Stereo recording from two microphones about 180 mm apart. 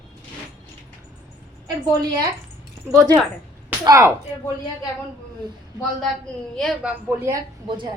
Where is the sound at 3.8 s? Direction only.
20° right (ahead or behind).